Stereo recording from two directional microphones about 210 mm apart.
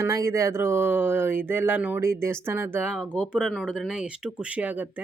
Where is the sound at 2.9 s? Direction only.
5° left (ahead or behind).